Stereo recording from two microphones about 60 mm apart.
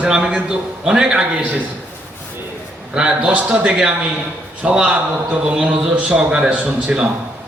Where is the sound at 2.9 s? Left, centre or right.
Centre.